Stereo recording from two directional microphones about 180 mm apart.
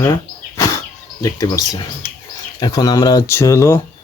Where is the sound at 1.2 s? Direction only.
20° left (ahead or behind).